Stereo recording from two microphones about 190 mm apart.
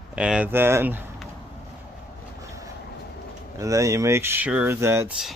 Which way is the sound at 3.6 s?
15° right (ahead or behind).